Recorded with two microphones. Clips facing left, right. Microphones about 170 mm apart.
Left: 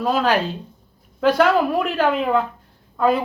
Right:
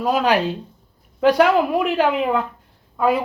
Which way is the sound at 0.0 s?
10° right (ahead or behind).